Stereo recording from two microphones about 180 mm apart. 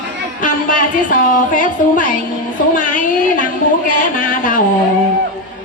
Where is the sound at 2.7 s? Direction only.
45° left (ahead or behind).